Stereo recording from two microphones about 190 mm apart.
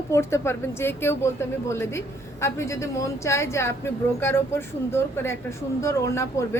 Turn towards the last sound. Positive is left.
turn(degrees=15)  # may be behind; listen again after turning